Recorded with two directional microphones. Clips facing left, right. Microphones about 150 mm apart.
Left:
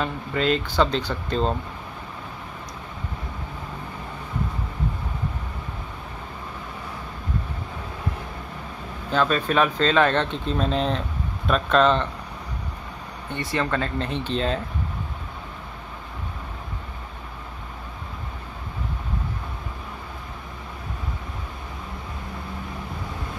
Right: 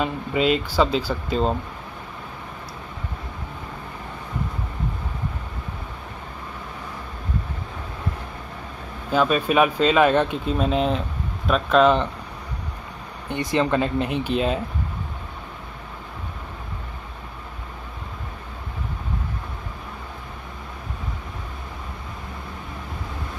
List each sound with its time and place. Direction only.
0.0 s speech: 10° right (ahead or behind)
9.1 s speech: 10° right (ahead or behind)
13.3 s speech: 20° right (ahead or behind)